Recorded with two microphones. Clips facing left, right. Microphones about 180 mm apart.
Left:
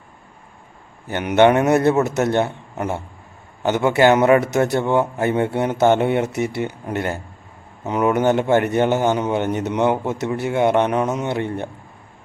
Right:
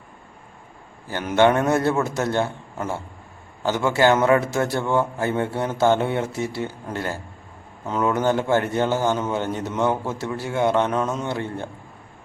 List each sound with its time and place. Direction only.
1.0 s a man's voice: 20° left (ahead or behind)